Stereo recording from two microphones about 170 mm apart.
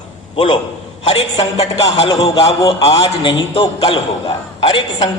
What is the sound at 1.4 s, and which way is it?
Speech, 40° left (ahead or behind).